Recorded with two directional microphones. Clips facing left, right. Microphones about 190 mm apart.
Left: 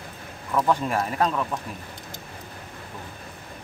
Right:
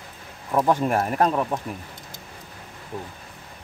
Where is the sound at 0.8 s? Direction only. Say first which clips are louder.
Right 3 dB; 50° right (ahead or behind).